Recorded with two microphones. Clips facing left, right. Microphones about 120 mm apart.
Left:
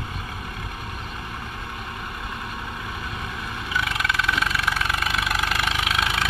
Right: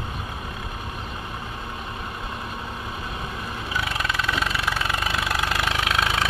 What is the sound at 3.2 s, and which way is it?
Vehicle, 15° right (ahead or behind).